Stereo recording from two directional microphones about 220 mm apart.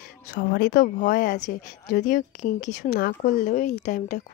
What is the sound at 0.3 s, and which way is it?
Speech, 40° left (ahead or behind).